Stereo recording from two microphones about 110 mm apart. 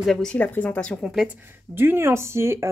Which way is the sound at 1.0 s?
5° right (ahead or behind).